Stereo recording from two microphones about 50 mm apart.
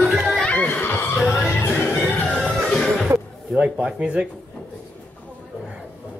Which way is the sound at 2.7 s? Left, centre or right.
Centre.